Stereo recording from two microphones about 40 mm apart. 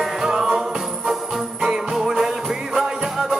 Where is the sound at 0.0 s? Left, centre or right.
Centre.